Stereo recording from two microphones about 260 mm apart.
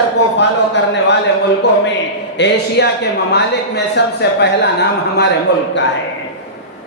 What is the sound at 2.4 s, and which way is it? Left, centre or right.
Speech, left.